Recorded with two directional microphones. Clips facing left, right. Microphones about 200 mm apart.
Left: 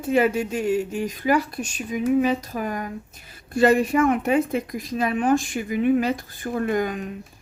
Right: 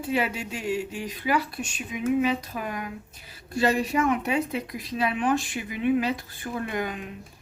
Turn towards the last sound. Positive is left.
turn(degrees=40)  # may be behind; listen again after turning